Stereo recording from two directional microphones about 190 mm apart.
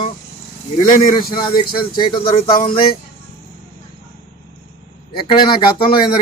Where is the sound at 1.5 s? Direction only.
25° left (ahead or behind).